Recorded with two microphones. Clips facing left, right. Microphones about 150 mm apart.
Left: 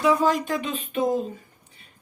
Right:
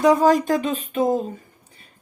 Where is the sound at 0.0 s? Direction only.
40° right (ahead or behind).